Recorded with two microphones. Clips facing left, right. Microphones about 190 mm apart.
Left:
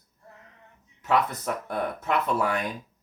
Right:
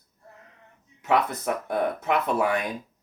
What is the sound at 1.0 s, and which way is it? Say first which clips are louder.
Speech: right 1 dB; 15° right (ahead or behind).